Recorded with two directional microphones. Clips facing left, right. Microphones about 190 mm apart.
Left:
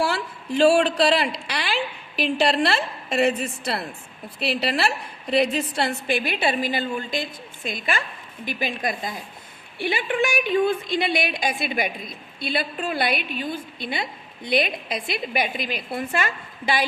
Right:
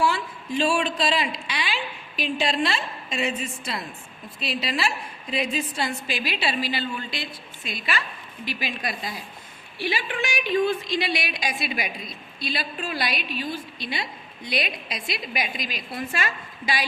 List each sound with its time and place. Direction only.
0.6 s a woman's voice: 70° left (ahead or behind); by 16.0 s 55° left (ahead or behind)